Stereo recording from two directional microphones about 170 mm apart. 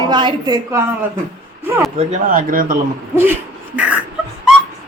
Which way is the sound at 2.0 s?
45° right (ahead or behind).